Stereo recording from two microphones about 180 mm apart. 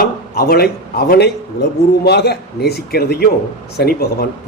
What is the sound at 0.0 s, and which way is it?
Speech, 60° left (ahead or behind).